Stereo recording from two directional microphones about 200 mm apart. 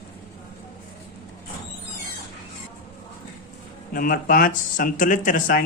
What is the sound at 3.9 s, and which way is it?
Speech, 45° left (ahead or behind).